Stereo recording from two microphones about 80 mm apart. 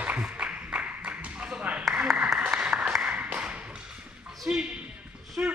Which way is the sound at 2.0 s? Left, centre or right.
Centre.